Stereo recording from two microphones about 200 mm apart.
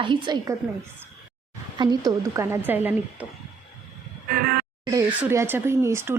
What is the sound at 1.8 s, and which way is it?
Speech, 20° right (ahead or behind).